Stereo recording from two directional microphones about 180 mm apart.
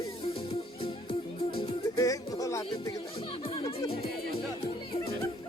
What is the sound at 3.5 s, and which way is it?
Speech, 35° left (ahead or behind).